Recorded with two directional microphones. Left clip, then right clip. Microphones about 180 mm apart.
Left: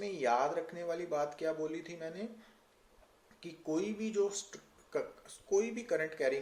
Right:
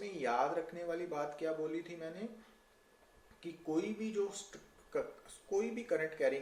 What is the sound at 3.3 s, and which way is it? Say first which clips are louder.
Speech: left 1 dB; 35° left (ahead or behind).